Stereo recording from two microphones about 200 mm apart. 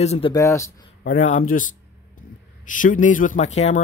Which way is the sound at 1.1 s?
40° left (ahead or behind).